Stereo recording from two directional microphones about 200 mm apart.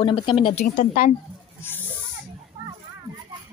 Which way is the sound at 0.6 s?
40° left (ahead or behind).